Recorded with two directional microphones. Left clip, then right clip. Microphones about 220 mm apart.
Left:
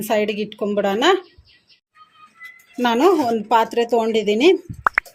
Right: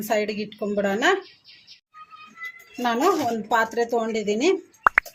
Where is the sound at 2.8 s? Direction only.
40° left (ahead or behind).